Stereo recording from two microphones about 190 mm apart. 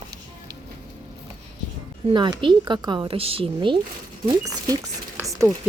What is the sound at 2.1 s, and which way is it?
A woman's voice, 25° right (ahead or behind).